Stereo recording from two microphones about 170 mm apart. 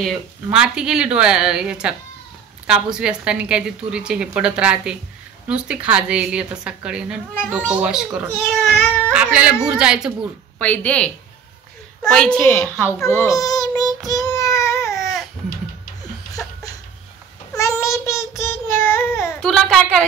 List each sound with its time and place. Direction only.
0.0 s a woman's voice: 5° right (ahead or behind)
10.6 s a woman's voice: 10° left (ahead or behind)
13.0 s child singing: 15° left (ahead or behind)
17.6 s child singing: 20° left (ahead or behind)
19.4 s a woman's voice: 5° left (ahead or behind)